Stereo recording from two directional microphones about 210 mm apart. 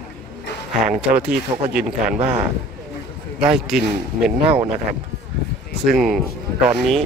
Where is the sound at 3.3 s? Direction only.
5° right (ahead or behind).